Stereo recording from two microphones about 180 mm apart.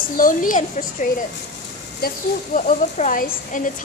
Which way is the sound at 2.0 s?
60° left (ahead or behind).